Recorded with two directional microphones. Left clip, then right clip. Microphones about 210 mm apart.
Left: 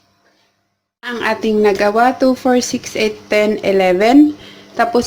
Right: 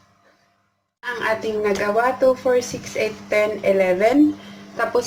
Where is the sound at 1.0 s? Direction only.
45° left (ahead or behind).